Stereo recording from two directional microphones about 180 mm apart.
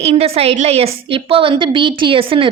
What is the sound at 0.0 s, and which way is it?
A woman's voice, 35° right (ahead or behind).